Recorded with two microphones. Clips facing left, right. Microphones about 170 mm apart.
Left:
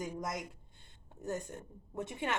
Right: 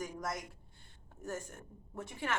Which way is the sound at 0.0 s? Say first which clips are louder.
Left 1 dB; 20° left (ahead or behind).